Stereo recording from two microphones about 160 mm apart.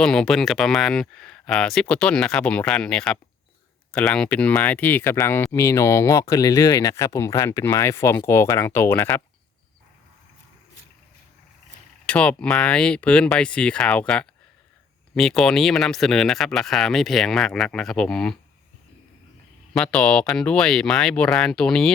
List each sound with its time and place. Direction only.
0.0 s speech: 5° left (ahead or behind)
12.0 s speech: 5° left (ahead or behind)
15.1 s speech: centre (ahead or behind)
19.7 s speech: 5° left (ahead or behind)